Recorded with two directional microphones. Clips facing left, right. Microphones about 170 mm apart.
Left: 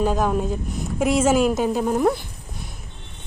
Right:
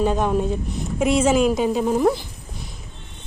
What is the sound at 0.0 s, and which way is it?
A woman's voice, centre (ahead or behind).